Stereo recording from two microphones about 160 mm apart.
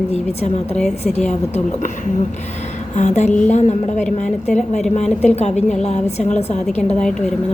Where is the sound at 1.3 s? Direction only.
45° left (ahead or behind).